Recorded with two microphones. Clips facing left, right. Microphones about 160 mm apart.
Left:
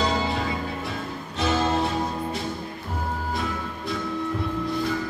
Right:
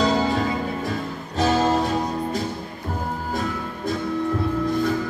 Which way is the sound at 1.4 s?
40° right (ahead or behind).